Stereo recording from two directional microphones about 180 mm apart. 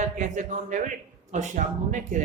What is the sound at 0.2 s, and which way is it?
A man's voice, 45° right (ahead or behind).